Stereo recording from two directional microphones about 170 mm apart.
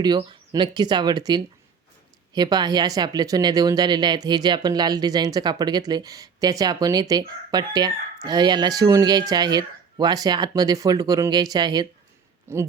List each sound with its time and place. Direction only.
0.0 s speech: 25° right (ahead or behind)